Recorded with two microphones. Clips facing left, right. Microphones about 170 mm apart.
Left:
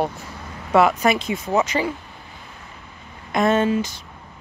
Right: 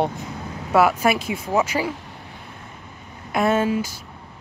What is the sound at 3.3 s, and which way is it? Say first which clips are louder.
Speech: left 1 dB; 5° right (ahead or behind).